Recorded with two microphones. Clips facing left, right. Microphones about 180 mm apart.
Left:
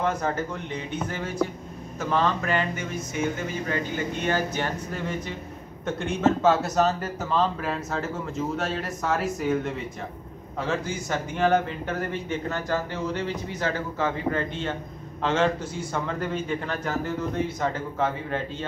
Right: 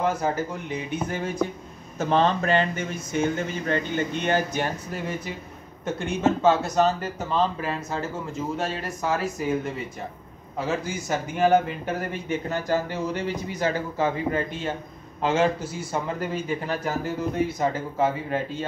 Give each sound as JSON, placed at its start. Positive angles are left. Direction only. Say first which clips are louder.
{"t": 0.0, "sound": "speech", "louder": "right 2 dB", "side_deg": -5}
{"t": 10.6, "sound": "speech", "louder": "right 1 dB", "side_deg": -10}